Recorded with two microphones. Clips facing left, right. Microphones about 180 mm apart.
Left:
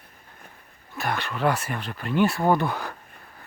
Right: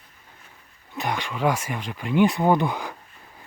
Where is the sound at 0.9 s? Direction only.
15° right (ahead or behind).